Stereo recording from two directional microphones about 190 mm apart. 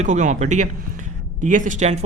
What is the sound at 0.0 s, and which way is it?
Speech, 40° right (ahead or behind).